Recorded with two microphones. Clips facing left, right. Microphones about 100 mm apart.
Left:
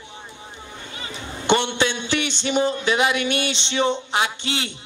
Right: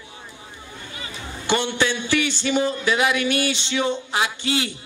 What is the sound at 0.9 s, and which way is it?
Speech, 25° left (ahead or behind).